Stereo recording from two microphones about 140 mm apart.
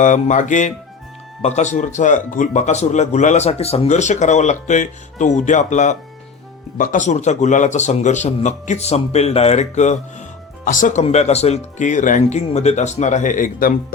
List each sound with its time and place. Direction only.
0.0 s speech: 60° left (ahead or behind)
11.0 s speech: 50° left (ahead or behind); by 13.7 s 80° left